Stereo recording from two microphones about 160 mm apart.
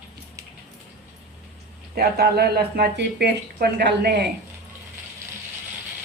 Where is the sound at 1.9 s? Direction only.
85° right.